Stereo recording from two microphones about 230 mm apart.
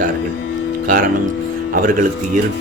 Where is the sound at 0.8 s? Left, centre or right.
Right.